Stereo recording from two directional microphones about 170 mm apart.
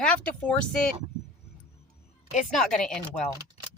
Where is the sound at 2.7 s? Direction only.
5° left (ahead or behind).